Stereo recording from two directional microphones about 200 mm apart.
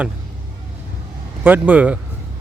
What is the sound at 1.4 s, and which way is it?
Speech, 10° right (ahead or behind).